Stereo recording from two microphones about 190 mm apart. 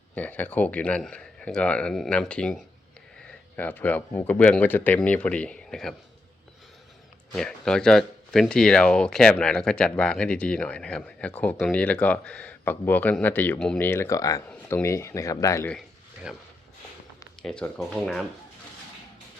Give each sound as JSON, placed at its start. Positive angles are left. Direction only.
{"t": 0.2, "sound": "speech", "side_deg": 10}
{"t": 7.3, "sound": "speech", "side_deg": 5}
{"t": 16.3, "sound": "speech", "side_deg": -5}